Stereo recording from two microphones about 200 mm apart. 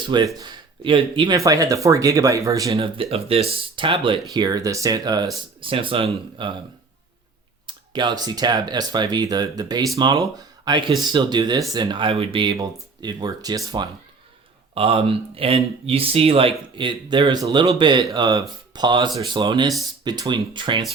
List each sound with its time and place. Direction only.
0.3 s speech: 25° right (ahead or behind)
2.7 s speech: 30° right (ahead or behind)
7.7 s speech: 20° right (ahead or behind)